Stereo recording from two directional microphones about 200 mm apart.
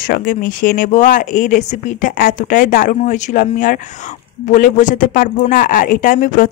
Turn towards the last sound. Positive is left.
turn(degrees=40)  # may be behind; listen again after turning